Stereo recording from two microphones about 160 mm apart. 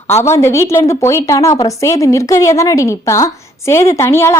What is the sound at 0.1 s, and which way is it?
A woman's voice, 15° left (ahead or behind).